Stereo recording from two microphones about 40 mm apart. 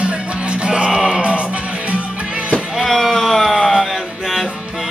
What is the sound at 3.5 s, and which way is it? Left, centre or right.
Music, centre.